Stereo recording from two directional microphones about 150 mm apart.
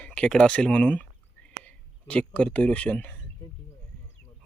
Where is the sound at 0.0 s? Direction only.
10° left (ahead or behind).